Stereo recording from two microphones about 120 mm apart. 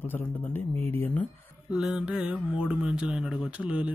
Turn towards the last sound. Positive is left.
turn(degrees=-10)  # may be behind; listen again after turning